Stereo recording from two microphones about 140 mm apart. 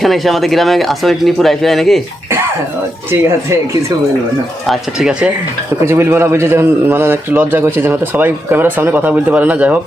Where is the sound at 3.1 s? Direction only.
20° right (ahead or behind).